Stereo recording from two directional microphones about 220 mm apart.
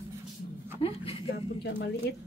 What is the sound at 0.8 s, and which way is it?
Speech, 25° left (ahead or behind).